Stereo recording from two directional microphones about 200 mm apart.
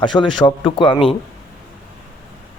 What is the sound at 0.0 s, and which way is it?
Speech, 25° left (ahead or behind).